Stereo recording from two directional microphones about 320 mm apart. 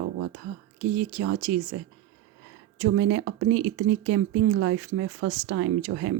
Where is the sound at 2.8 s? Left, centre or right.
Right.